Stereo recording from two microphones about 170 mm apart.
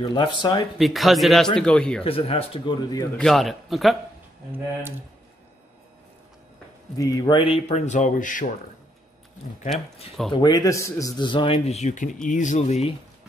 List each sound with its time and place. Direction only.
0.0 s a man's voice: 25° left (ahead or behind)
0.7 s speech: centre (ahead or behind)
2.0 s speech: 35° left (ahead or behind)
3.2 s speech: centre (ahead or behind)
7.0 s speech: 25° left (ahead or behind); by 8.5 s 50° left (ahead or behind)
10.3 s a man's voice: 25° left (ahead or behind); by 12.9 s 40° left (ahead or behind)